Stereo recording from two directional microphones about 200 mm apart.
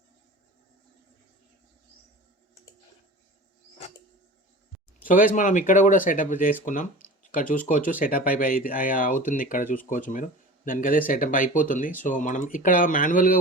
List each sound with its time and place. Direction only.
5.0 s speech: 45° left (ahead or behind)